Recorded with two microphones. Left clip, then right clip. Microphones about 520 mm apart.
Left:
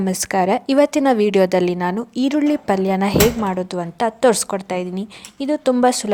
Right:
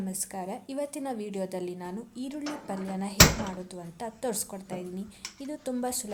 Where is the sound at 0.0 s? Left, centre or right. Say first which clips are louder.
Left 19 dB; right.